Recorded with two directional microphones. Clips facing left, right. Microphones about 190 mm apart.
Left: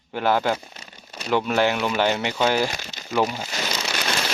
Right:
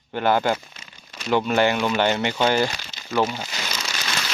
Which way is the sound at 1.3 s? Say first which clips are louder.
Right 1 dB; centre (ahead or behind).